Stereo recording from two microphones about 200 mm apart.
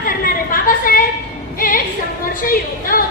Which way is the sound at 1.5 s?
45° left (ahead or behind).